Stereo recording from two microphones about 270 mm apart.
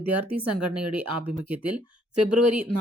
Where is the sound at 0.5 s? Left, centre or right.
Right.